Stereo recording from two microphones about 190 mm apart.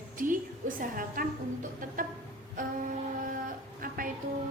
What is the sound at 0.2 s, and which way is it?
A woman's voice, 45° right (ahead or behind).